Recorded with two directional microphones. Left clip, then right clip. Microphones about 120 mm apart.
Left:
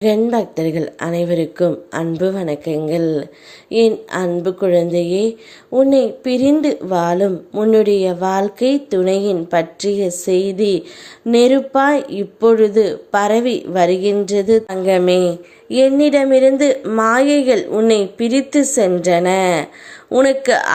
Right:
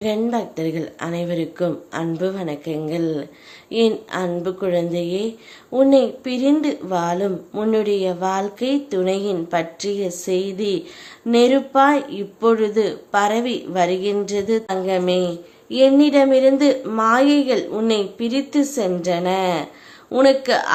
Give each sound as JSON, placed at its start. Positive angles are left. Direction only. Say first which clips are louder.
{"t": 0.3, "sound": "speech", "louder": "left 5 dB", "side_deg": 45}
{"t": 17.7, "sound": "speech", "louder": "left 7 dB", "side_deg": 30}
{"t": 17.9, "sound": "speech", "louder": "left 6 dB", "side_deg": 40}